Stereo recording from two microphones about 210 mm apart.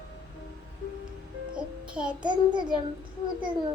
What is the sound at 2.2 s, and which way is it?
Speech, 20° right (ahead or behind).